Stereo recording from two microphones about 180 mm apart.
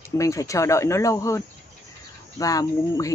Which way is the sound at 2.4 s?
20° left (ahead or behind).